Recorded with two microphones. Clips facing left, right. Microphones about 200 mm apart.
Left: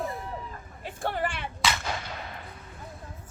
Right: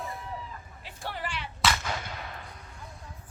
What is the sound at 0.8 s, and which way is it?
Vehicle, 50° left (ahead or behind).